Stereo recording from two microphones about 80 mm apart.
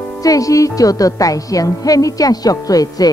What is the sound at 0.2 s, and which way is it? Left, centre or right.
Speech, left.